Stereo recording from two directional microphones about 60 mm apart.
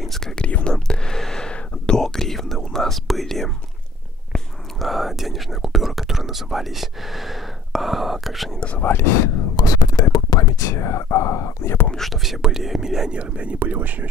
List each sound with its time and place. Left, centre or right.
0.0 s whispering: centre
0.4 s whispering: centre
4.7 s speech: centre
8.5 s speech: left
8.8 s speech: left
9.6 s speech: left
11.6 s speech: left
12.0 s speech: centre
13.1 s speech: centre
13.6 s speech: right